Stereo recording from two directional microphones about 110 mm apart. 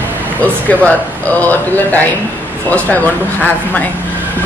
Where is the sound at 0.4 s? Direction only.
15° left (ahead or behind).